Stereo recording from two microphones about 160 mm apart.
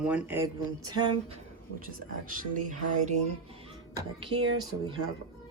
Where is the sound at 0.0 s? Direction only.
10° right (ahead or behind); by 1.1 s 25° right (ahead or behind).